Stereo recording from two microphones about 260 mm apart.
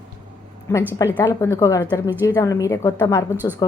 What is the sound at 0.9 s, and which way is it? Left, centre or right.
A woman's voice, centre.